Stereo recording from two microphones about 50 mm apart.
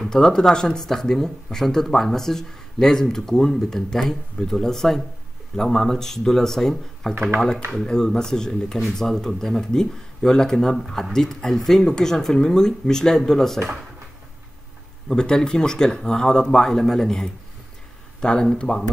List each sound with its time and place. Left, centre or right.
0.1 s speech: centre
15.0 s speech: centre